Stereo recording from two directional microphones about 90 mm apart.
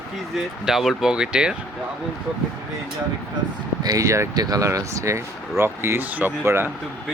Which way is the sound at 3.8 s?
40° right (ahead or behind).